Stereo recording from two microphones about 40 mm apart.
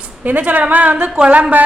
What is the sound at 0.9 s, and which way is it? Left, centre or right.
Speech, right.